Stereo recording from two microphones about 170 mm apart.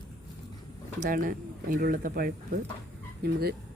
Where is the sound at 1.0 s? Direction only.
50° right (ahead or behind).